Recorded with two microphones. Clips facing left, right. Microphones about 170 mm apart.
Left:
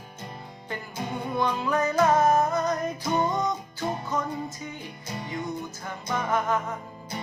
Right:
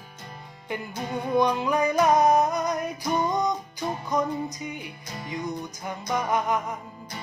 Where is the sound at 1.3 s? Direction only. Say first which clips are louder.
Right 3 dB; 15° right (ahead or behind).